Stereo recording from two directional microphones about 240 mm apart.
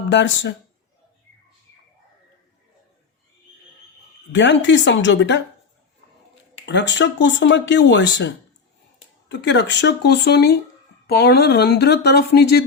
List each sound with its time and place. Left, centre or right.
0.1 s speech: left
4.3 s speech: left
6.7 s speech: left
9.3 s speech: left